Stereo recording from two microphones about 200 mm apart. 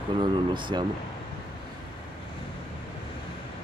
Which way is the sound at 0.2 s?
25° right (ahead or behind).